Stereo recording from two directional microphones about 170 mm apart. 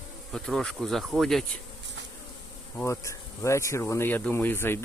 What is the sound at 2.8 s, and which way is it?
Speech, 15° left (ahead or behind).